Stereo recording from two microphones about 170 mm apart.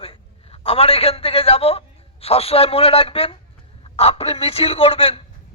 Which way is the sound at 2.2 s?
35° left (ahead or behind).